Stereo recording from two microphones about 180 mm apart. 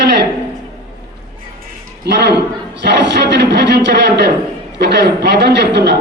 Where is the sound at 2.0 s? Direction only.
65° right (ahead or behind).